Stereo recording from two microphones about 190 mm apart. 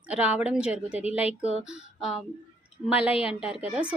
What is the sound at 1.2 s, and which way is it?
Speech, 35° left (ahead or behind).